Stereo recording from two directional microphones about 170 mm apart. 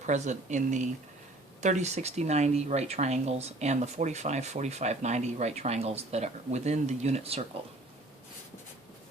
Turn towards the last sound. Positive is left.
turn(degrees=-40)  # may be behind; listen again after turning